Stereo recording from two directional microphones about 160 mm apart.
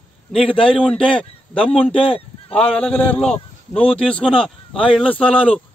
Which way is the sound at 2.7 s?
10° left (ahead or behind).